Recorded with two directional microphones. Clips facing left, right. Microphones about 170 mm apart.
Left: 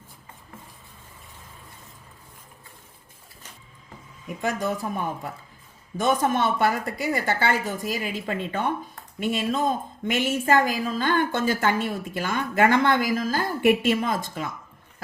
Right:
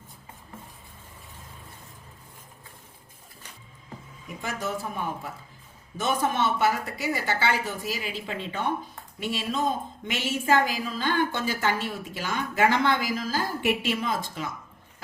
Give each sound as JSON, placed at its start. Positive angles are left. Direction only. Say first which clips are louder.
{"t": 4.4, "sound": "a woman's voice", "louder": "left 5 dB", "side_deg": 50}
{"t": 6.0, "sound": "a woman's voice", "louder": "left 3 dB", "side_deg": 50}